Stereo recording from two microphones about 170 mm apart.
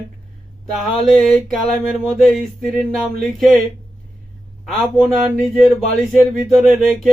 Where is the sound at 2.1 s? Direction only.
Centre (ahead or behind).